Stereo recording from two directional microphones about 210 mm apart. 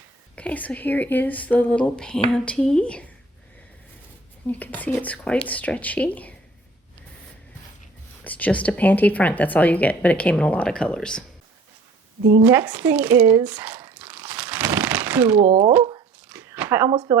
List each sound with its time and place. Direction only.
0.3 s a woman's voice: 5° left (ahead or behind)
4.4 s speech: 10° left (ahead or behind)
8.2 s speech: 5° left (ahead or behind)
12.5 s crumpling: 5° right (ahead or behind)
15.4 s speech: 30° right (ahead or behind)
15.8 s a sound: 20° right (ahead or behind)
16.3 s a sound: 10° right (ahead or behind)
16.9 s speech: 25° right (ahead or behind)